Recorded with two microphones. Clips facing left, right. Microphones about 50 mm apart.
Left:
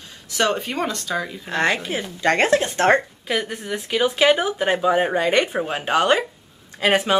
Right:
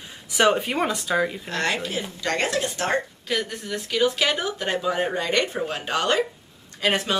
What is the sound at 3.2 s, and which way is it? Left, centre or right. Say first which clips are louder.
Speech: left 3 dB; centre.